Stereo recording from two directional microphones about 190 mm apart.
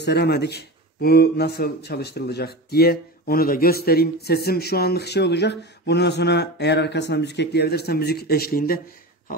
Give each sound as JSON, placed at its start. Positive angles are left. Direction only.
{"t": 0.0, "sound": "speech", "side_deg": 60}